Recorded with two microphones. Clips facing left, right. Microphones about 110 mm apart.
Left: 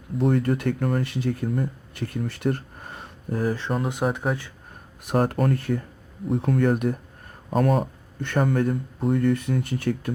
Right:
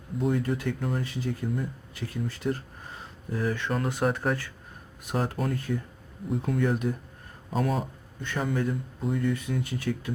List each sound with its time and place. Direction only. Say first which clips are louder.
0.2 s speech: left 5 dB; 60° left (ahead or behind)
3.3 s speech: left 4 dB; 40° left (ahead or behind)
4.0 s speech: left 1 dB; 15° left (ahead or behind)
5.0 s speech: left 7 dB; 55° left (ahead or behind)